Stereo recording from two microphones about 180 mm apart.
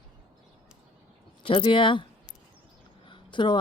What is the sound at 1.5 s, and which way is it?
Speech, 30° left (ahead or behind).